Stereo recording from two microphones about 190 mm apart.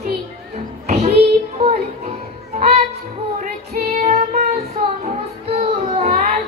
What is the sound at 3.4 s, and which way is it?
Female singing, 45° right (ahead or behind).